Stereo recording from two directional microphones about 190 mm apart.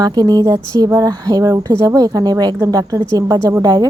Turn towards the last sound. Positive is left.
turn(degrees=-20)  # may be behind; listen again after turning